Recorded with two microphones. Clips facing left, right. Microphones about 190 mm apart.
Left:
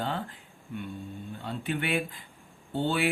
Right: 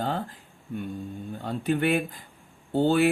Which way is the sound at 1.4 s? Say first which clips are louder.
Right 7 dB; 40° right (ahead or behind).